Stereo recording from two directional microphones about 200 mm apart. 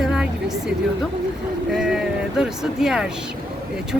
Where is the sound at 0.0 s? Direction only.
5° right (ahead or behind).